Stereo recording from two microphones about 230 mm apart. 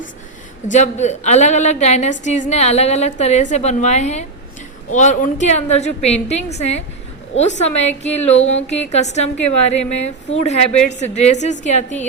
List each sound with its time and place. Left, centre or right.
0.7 s a woman's voice: left